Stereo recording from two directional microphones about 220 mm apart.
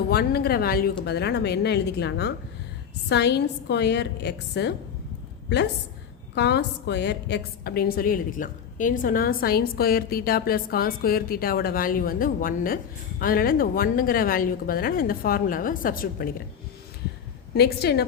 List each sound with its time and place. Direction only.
0.1 s a woman's voice: 45° left (ahead or behind)
6.3 s a woman's voice: 50° left (ahead or behind)
17.5 s a woman's voice: 45° left (ahead or behind)